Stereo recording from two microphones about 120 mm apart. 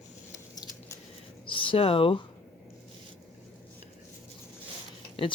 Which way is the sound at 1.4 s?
45° left (ahead or behind).